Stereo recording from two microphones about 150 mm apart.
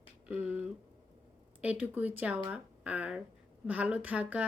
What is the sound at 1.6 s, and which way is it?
Speech, 10° right (ahead or behind).